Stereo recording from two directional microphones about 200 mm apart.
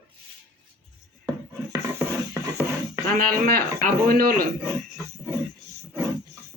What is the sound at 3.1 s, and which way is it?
Speech, 50° right (ahead or behind).